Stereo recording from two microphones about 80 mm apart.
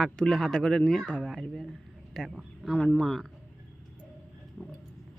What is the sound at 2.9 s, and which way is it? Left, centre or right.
Speech, centre.